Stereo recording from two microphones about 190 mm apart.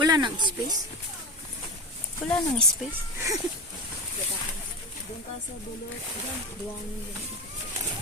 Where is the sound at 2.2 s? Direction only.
5° left (ahead or behind).